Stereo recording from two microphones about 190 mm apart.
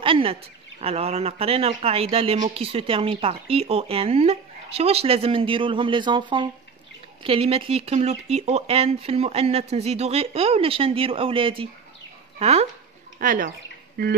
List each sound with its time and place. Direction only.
0.0 s speech: 30° right (ahead or behind)
13.2 s speech: 45° right (ahead or behind)